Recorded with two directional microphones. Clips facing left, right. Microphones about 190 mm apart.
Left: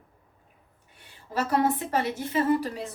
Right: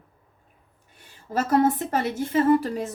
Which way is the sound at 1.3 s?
45° right (ahead or behind).